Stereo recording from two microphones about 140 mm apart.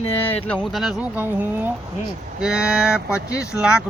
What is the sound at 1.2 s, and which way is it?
Speech, 15° right (ahead or behind).